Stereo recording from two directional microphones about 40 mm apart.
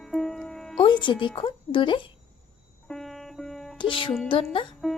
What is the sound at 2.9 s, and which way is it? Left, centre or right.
Music, centre.